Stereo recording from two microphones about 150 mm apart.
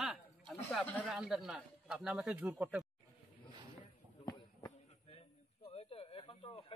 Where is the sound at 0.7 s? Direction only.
10° left (ahead or behind).